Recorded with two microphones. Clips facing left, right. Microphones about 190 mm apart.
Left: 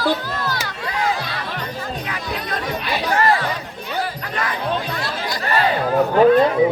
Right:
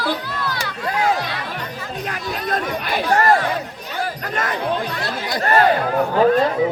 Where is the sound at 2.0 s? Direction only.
45° right (ahead or behind).